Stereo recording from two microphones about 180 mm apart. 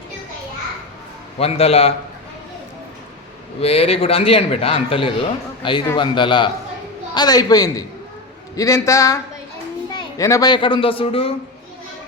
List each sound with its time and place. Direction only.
1.4 s a man's voice: 35° left (ahead or behind)
3.6 s a man's voice: 35° left (ahead or behind)